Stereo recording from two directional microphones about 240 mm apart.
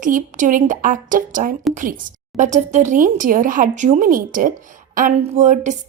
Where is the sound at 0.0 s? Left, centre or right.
Right.